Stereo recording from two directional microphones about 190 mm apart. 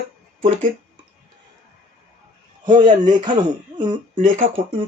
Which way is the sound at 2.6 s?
25° right (ahead or behind).